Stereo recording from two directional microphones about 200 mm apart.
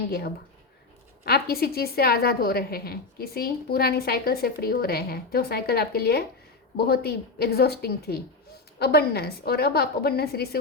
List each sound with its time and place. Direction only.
1.2 s a woman's voice: 50° left (ahead or behind)